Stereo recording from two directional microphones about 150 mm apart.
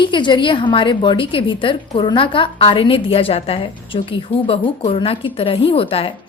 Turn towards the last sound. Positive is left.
turn(degrees=40)  # may be behind; listen again after turning